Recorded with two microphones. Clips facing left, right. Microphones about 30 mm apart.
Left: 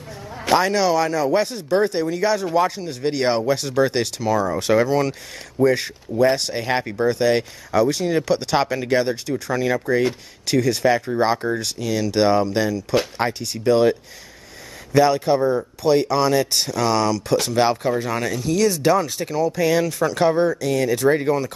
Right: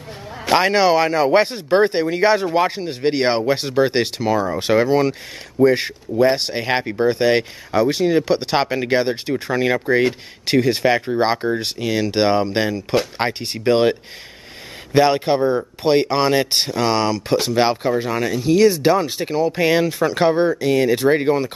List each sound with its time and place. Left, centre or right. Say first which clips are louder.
0.3 s a sound: right 1 dB; centre
0.6 s speech: right 4 dB; right; by 18.4 s centre
18.4 s speech: right 6 dB; right